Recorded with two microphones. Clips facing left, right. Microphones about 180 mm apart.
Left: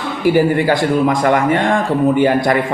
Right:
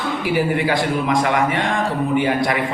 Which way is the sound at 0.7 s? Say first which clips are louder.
Left 5 dB; 50° left (ahead or behind).